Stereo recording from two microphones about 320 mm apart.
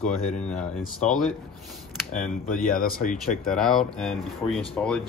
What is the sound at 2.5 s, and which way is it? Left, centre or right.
Speech, left.